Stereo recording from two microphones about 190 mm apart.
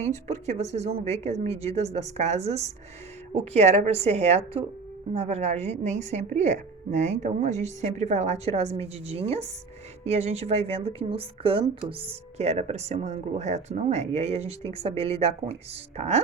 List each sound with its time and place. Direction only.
0.3 s speech: 35° right (ahead or behind)